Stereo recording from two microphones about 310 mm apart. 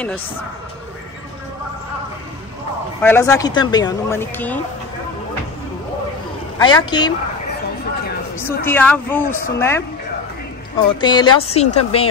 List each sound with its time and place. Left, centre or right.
3.0 s speech: centre
6.6 s speech: centre
8.6 s speech: centre
10.9 s a woman's voice: centre